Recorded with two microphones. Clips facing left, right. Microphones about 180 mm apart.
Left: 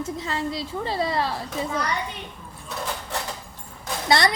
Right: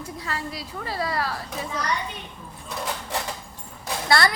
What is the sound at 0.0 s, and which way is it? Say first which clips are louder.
A woman's voice: left 5 dB; 25° left (ahead or behind).